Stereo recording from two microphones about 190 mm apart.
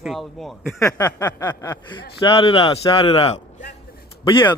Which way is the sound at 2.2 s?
30° left (ahead or behind).